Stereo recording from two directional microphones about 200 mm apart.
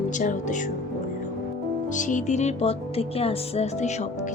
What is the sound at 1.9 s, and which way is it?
Speech, 40° left (ahead or behind).